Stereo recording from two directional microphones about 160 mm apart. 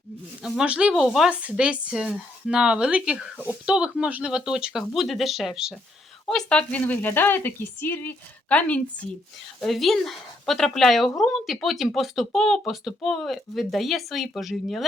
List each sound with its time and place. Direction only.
0.4 s speech: 5° right (ahead or behind)